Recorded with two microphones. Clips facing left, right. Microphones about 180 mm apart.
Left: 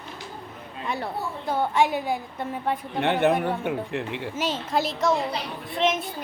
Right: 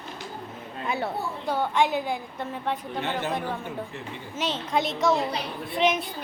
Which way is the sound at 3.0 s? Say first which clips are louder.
Left 10 dB; 65° left (ahead or behind).